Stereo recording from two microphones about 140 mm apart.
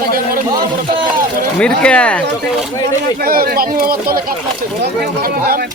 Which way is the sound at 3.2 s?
90° right.